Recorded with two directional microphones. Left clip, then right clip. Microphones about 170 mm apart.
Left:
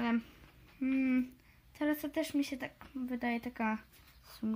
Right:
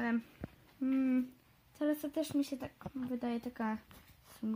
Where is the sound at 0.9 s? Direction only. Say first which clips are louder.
Left 1 dB; 10° right (ahead or behind).